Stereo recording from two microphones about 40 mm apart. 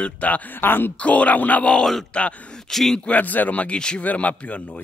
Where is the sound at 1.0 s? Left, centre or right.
Left.